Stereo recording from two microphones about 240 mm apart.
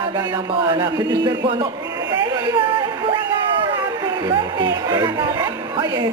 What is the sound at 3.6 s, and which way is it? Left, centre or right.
Speech, centre.